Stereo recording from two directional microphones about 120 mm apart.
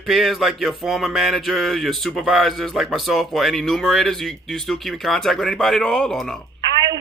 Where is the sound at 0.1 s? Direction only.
Centre (ahead or behind).